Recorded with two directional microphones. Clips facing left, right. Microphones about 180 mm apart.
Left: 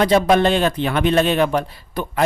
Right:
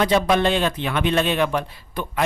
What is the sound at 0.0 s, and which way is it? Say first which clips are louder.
A man's voice: left 4 dB; 40° left (ahead or behind).